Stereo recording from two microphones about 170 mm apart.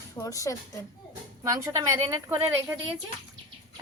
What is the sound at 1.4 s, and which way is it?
Speech, 20° right (ahead or behind).